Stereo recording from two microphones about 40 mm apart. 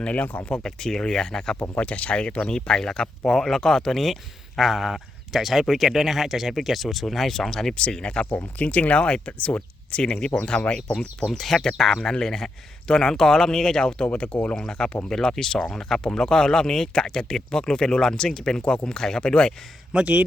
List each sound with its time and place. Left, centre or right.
0.0 s speech: left
0.5 s speech: centre
1.8 s speech: left
2.5 s speech: centre
4.0 s speech: centre
7.8 s speech: left
8.5 s speech: left
11.3 s speech: centre
14.0 s speech: left
15.1 s speech: centre
19.9 s speech: right